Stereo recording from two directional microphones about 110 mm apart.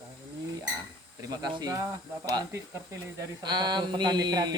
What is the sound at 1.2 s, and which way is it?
Speech, 35° right (ahead or behind).